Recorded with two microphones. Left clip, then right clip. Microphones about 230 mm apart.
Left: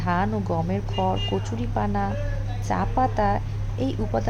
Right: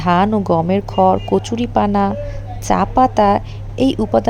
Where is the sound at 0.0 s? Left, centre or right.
Right.